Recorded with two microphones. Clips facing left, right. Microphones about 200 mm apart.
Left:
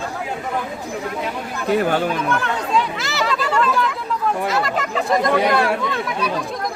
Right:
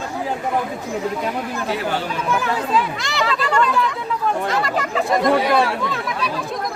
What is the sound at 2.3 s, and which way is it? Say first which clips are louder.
Speech: right 1 dB; 5° right (ahead or behind).